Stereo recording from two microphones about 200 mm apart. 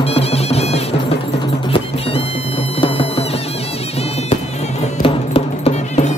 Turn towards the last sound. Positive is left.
turn(degrees=35)  # may be behind; listen again after turning